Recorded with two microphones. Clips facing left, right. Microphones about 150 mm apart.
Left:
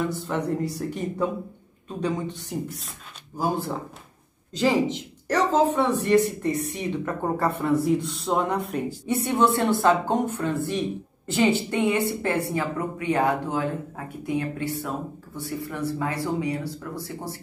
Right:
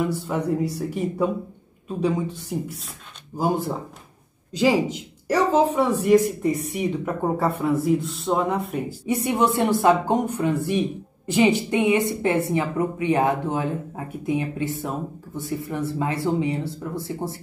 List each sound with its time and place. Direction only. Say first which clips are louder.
0.0 s speech: right 2 dB; 5° right (ahead or behind)
3.3 s speech: right 3 dB; 20° right (ahead or behind); by 9.1 s centre (ahead or behind)
9.1 s speech: right 1 dB; 15° right (ahead or behind)